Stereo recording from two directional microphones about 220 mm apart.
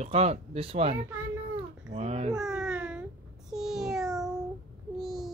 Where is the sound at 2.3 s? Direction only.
5° right (ahead or behind).